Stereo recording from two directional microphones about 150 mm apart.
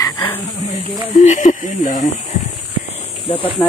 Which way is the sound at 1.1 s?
55° left (ahead or behind).